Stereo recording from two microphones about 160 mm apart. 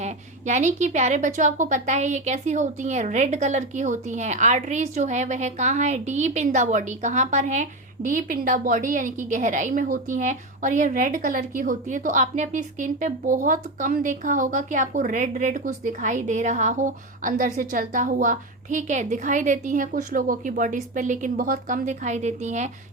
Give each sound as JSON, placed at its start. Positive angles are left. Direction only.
{"t": 0.0, "sound": "a woman's voice", "side_deg": -50}